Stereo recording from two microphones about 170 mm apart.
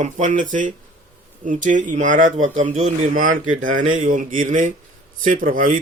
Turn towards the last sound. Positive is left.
turn(degrees=-55)  # may be behind; listen again after turning